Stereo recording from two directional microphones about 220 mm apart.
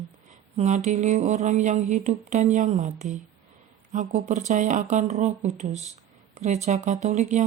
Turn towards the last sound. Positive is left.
turn(degrees=-30)  # may be behind; listen again after turning